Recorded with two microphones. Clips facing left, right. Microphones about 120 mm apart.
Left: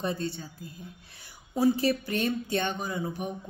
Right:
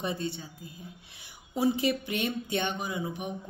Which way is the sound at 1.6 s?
20° right (ahead or behind).